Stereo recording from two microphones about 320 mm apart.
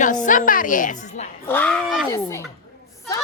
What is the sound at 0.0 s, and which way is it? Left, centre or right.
A woman's voice, left.